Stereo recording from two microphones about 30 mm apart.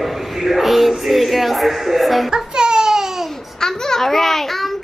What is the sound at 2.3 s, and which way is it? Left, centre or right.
Baby cry, right.